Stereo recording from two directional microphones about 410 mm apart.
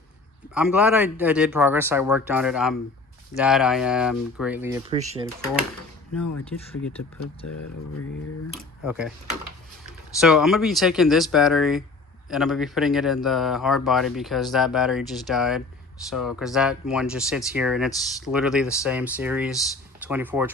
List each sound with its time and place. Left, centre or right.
0.5 s speech: centre
7.4 s speech: left
8.8 s speech: centre
10.2 s speech: centre